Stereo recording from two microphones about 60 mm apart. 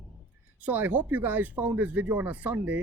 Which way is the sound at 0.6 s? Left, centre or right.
Right.